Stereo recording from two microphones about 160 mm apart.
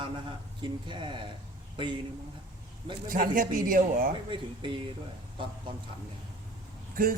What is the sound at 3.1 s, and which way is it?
A man's voice, 60° right (ahead or behind).